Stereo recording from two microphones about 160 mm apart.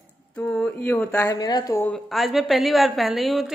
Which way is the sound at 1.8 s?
5° left (ahead or behind).